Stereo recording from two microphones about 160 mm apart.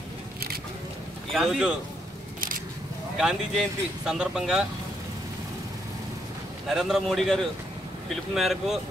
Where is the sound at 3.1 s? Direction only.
5° right (ahead or behind).